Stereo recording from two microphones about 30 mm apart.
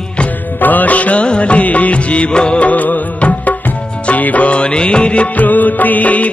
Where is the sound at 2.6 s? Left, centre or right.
Left.